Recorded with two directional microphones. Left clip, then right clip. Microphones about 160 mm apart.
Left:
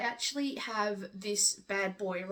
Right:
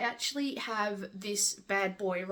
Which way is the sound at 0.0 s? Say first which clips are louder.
Right 1 dB; 25° right (ahead or behind).